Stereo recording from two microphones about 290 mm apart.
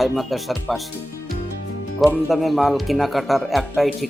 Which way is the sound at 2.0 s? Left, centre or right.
Centre.